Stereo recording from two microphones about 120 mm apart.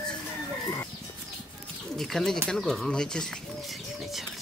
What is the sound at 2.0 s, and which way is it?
Speech, centre (ahead or behind).